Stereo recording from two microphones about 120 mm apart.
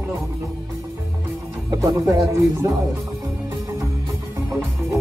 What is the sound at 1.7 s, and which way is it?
Speech, 30° right (ahead or behind).